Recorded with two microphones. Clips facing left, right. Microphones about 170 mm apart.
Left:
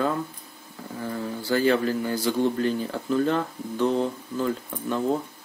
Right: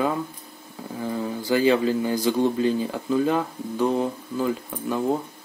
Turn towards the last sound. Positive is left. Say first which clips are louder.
# right 1 dB
turn(degrees=-10)  # may be behind; listen again after turning